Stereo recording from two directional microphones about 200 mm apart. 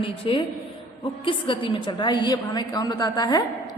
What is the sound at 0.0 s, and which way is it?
A woman's voice, 25° left (ahead or behind).